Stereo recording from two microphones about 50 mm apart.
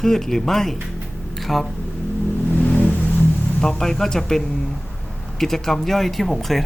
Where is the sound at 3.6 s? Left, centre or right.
Centre.